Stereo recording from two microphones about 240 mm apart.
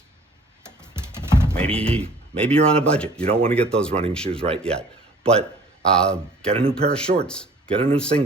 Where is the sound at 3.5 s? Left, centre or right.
Centre.